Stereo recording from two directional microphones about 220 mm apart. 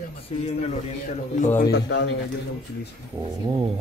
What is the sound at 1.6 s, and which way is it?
Speech, 50° left (ahead or behind).